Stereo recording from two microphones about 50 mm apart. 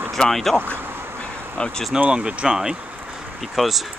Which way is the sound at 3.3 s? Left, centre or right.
Centre.